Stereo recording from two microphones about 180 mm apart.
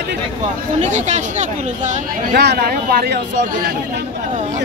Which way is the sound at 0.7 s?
40° right (ahead or behind).